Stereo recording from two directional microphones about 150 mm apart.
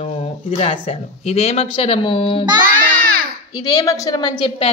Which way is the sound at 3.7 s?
25° left (ahead or behind).